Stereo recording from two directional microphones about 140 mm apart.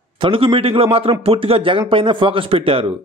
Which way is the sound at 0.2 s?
40° right (ahead or behind).